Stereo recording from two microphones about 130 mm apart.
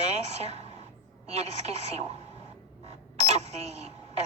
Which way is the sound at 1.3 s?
55° right (ahead or behind).